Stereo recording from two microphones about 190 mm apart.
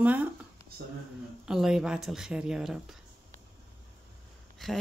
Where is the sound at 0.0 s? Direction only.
10° right (ahead or behind).